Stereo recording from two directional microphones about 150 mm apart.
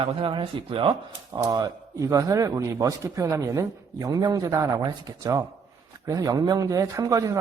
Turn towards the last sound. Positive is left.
turn(degrees=-20)  # may be behind; listen again after turning